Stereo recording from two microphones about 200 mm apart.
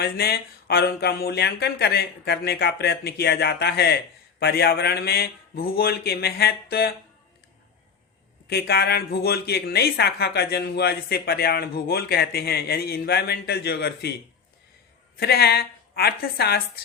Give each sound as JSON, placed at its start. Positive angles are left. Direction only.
{"t": 0.0, "sound": "speech", "side_deg": 50}
{"t": 8.4, "sound": "speech", "side_deg": 55}
{"t": 15.2, "sound": "speech", "side_deg": 55}